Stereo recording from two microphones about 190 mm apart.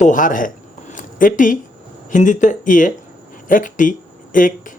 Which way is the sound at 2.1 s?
40° left (ahead or behind).